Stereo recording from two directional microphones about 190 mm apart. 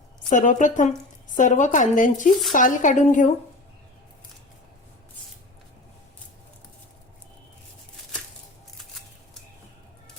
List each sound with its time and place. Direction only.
0.3 s speech: 40° left (ahead or behind)